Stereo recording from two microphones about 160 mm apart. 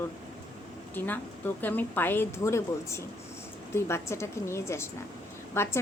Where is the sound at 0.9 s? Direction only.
10° left (ahead or behind).